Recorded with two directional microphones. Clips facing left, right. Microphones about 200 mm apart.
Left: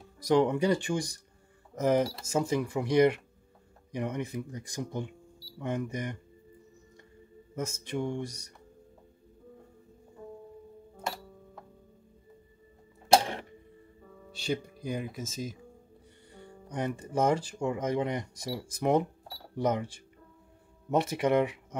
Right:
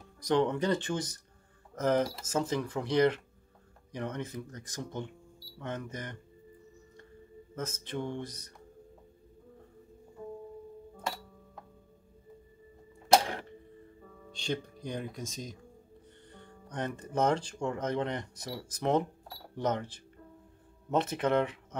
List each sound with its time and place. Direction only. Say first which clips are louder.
0.2 s speech: left 3 dB; 10° left (ahead or behind)
7.5 s speech: left 3 dB; 10° left (ahead or behind)
13.1 s printer: left 1 dB; 25° left (ahead or behind)
14.3 s speech: left 2 dB; 10° left (ahead or behind)